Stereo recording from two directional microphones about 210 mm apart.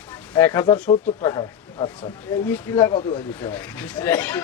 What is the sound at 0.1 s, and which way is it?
Speech, 10° left (ahead or behind).